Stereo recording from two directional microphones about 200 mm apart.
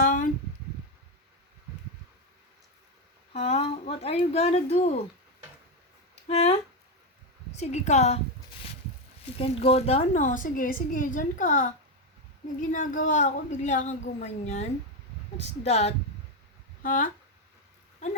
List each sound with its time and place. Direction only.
0.0 s a sound: 40° left (ahead or behind)
3.3 s a woman's voice: 30° left (ahead or behind)
6.2 s a woman's voice: 30° left (ahead or behind)
9.2 s a woman's voice: 30° left (ahead or behind)